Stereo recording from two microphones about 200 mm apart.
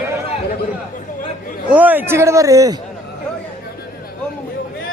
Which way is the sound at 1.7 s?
10° right (ahead or behind).